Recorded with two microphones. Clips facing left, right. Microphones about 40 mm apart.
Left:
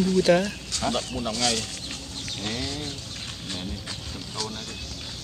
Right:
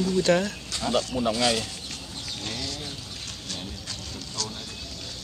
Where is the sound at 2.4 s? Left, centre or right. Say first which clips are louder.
Left 4 dB; centre.